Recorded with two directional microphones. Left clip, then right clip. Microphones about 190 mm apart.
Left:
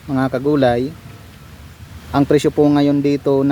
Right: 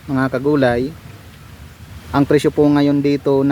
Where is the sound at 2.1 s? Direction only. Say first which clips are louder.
Even; centre (ahead or behind).